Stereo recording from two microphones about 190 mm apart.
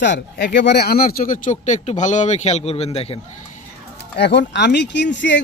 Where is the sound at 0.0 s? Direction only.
70° left (ahead or behind); by 3.2 s 30° left (ahead or behind).